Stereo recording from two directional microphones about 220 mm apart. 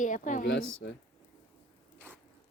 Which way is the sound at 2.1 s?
10° right (ahead or behind).